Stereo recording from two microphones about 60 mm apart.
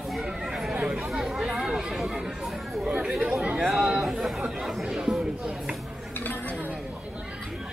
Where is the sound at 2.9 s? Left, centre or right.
Centre.